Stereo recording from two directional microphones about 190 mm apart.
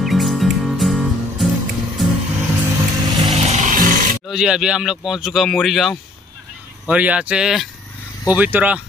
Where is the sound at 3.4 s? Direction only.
40° right (ahead or behind).